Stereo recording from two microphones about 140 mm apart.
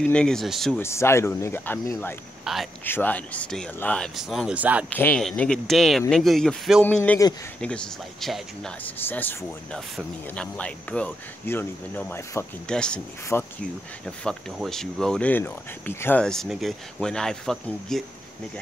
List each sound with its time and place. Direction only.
0.1 s speech: 5° left (ahead or behind)
0.7 s speech: 20° left (ahead or behind)
2.4 s speech: centre (ahead or behind)
2.8 s speech: 15° left (ahead or behind); by 4.8 s 10° right (ahead or behind)
4.8 s speech: 10° left (ahead or behind)
6.8 s speech: 10° left (ahead or behind)
14.0 s speech: 5° left (ahead or behind)